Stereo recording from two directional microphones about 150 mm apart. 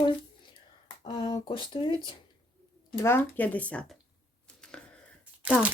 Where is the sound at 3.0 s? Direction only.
15° left (ahead or behind).